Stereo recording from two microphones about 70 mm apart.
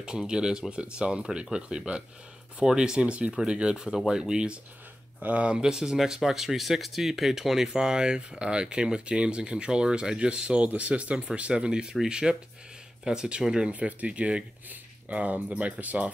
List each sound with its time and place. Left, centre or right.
0.3 s speech: centre